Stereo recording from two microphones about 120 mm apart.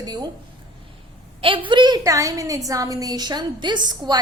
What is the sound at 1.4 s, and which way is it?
A woman's voice, 45° right (ahead or behind).